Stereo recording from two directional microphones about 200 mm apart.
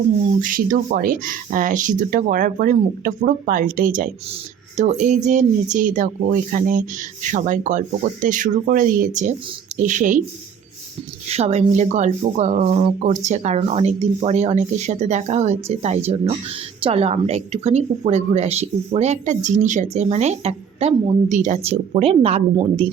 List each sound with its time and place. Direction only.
0.3 s a woman's voice: 40° right (ahead or behind)
11.3 s a woman's voice: 30° right (ahead or behind)